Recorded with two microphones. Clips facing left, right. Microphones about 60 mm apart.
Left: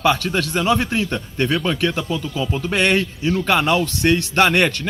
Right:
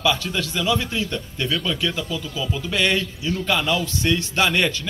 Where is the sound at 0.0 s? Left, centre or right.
Left.